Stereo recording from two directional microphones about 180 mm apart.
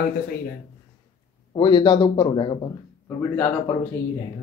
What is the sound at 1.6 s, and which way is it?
A man's voice, 25° left (ahead or behind).